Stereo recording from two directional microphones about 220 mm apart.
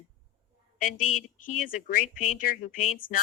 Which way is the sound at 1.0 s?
85° left.